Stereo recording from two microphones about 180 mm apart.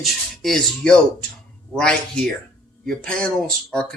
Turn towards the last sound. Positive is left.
turn(degrees=5)  # may be behind; listen again after turning